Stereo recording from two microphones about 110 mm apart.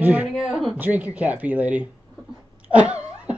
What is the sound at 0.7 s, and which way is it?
Speech, 15° right (ahead or behind).